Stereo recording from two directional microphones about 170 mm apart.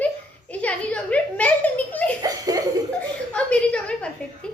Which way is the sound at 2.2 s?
20° right (ahead or behind).